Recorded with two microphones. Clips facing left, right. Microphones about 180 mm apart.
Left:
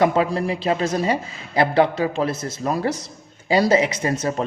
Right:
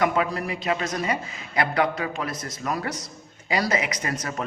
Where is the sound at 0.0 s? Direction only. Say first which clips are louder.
Left 5 dB; 30° left (ahead or behind).